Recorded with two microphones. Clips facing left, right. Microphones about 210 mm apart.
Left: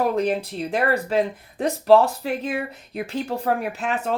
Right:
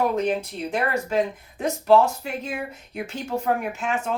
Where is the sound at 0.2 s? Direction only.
35° left (ahead or behind).